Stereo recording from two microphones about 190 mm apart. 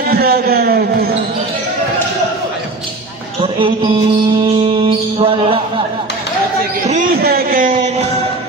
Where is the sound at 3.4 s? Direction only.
25° right (ahead or behind).